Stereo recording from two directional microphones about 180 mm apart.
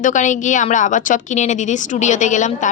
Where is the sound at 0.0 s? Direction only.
45° left (ahead or behind).